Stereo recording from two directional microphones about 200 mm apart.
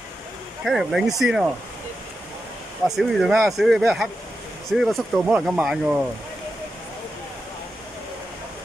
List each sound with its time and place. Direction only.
0.7 s speech: centre (ahead or behind)
3.0 s speech: centre (ahead or behind)